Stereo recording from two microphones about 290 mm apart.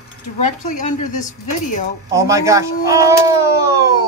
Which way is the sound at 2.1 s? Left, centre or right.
Centre.